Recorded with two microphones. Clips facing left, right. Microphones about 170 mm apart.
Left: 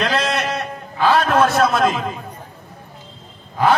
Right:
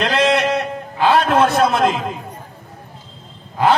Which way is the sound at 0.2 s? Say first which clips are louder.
Right 6 dB; 20° right (ahead or behind).